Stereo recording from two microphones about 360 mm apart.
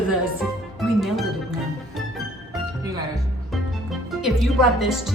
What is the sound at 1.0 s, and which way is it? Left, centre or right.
Speech, centre.